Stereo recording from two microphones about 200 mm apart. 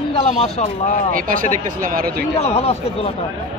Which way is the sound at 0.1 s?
30° left (ahead or behind).